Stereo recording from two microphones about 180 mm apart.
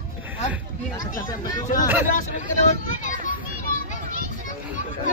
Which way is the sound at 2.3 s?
45° left (ahead or behind).